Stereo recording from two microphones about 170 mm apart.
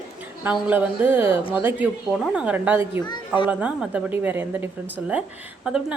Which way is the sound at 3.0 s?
25° left (ahead or behind).